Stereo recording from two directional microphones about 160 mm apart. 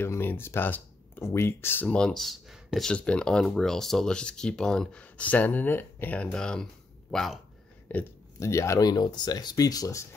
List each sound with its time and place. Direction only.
0.0 s speech: 15° left (ahead or behind)
7.9 s speech: 15° left (ahead or behind)